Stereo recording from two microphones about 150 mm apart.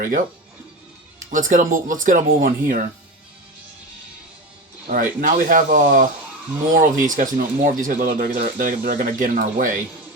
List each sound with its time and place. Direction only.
1.3 s speech: 60° right (ahead or behind)
4.9 s speech: 70° right (ahead or behind)